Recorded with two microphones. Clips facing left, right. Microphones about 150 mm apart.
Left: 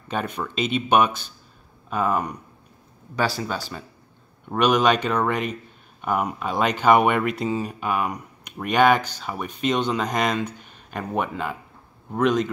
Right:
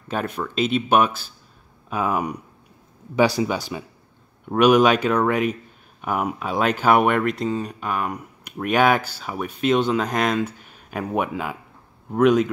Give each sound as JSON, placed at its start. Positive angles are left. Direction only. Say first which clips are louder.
{"t": 0.1, "sound": "speech", "louder": "right 2 dB", "side_deg": -5}